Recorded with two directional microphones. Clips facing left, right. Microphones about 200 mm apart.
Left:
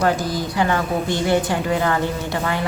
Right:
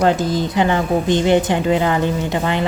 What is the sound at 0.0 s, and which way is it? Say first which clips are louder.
A woman's voice: right 4 dB; 25° right (ahead or behind).